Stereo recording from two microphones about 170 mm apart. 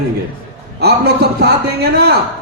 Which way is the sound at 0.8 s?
70° right (ahead or behind).